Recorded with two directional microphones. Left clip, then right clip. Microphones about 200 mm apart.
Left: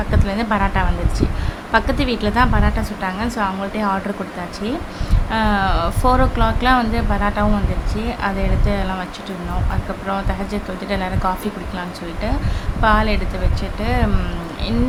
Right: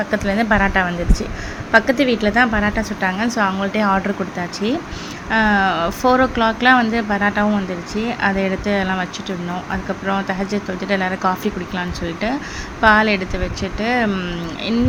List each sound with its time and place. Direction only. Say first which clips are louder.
0.1 s a woman's voice: right 3 dB; 15° right (ahead or behind)
5.3 s speech: right 3 dB; 10° right (ahead or behind)
10.1 s speech: right 2 dB; 10° right (ahead or behind)
12.8 s speech: right 3 dB; 15° right (ahead or behind)